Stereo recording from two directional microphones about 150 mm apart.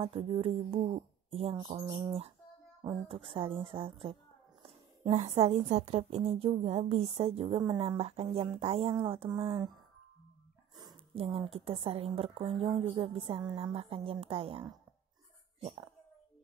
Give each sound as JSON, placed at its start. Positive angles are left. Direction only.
{"t": 0.0, "sound": "a woman's voice", "side_deg": -40}
{"t": 11.1, "sound": "a woman's voice", "side_deg": -35}